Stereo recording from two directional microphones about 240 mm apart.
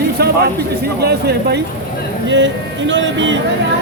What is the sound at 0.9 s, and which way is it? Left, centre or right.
Speech, right.